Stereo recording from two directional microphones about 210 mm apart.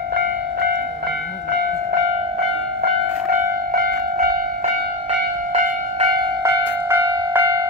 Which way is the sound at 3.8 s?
45° right (ahead or behind).